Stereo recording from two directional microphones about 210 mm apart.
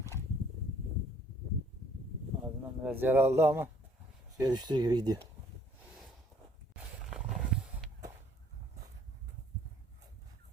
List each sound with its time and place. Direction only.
2.4 s speech: 10° right (ahead or behind)
7.0 s wild animals: centre (ahead or behind)